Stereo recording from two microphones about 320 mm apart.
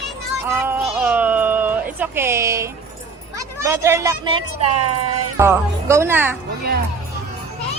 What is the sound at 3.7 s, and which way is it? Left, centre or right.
Speech, centre.